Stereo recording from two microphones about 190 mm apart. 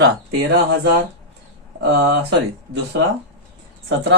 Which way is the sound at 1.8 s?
60° right (ahead or behind).